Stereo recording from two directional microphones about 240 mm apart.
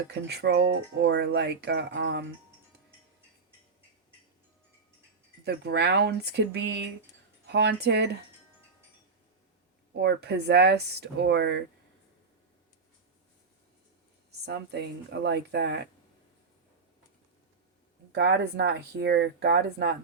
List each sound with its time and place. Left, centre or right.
0.1 s speech: right
5.5 s speech: right
10.0 s speech: right
14.3 s speech: right
18.1 s speech: right